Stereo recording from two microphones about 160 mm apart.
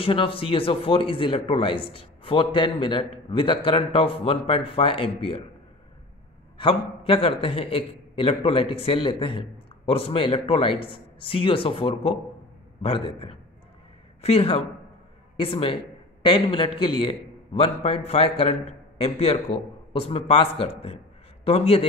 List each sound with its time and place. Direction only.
0.0 s speech: 35° left (ahead or behind)
6.6 s a man's voice: 35° left (ahead or behind)